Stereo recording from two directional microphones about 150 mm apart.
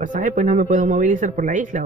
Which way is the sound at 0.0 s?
60° right (ahead or behind).